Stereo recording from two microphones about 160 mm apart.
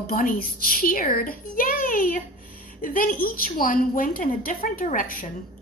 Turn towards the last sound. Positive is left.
turn(degrees=60)  # may be behind; listen again after turning